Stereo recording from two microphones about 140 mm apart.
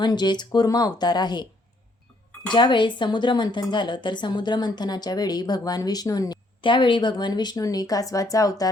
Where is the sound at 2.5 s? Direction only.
35° left (ahead or behind).